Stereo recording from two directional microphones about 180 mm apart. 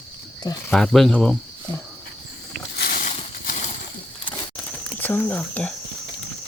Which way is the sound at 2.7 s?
55° left (ahead or behind).